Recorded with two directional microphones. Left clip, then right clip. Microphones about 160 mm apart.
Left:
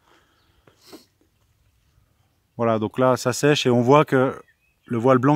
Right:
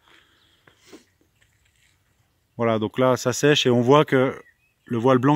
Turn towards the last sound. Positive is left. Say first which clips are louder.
# left 1 dB
turn(degrees=0)  # may be behind; listen again after turning